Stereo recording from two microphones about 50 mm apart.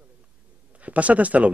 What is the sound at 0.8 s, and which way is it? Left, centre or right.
Speech, right.